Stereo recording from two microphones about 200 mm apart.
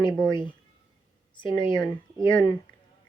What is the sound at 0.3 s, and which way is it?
Speech, 25° left (ahead or behind).